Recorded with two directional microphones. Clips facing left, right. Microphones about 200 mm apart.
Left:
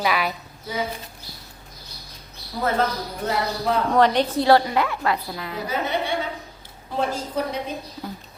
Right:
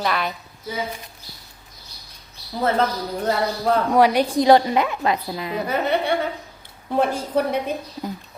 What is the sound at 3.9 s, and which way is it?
A woman's voice, 10° right (ahead or behind).